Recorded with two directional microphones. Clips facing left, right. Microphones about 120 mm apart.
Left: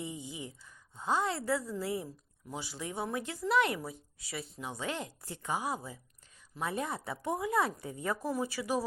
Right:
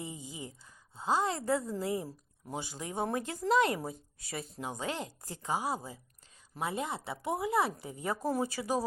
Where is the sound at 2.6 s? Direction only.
40° right (ahead or behind).